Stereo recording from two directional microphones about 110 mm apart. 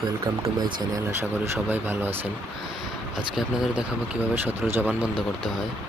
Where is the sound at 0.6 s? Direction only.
40° right (ahead or behind).